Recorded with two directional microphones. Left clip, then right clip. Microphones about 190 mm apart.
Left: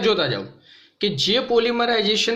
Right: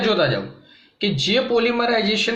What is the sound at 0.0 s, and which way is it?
A man's voice, 55° left (ahead or behind).